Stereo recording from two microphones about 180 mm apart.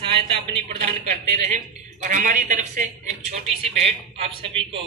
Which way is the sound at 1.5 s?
40° right (ahead or behind).